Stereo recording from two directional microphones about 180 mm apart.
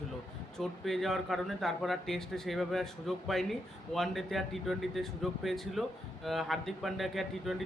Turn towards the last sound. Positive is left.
turn(degrees=0)  # may be behind; listen again after turning